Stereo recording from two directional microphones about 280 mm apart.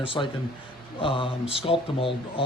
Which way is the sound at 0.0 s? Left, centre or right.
Centre.